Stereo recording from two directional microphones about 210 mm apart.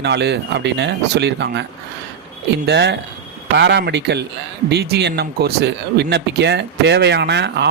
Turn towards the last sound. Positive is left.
turn(degrees=-55)  # may be behind; listen again after turning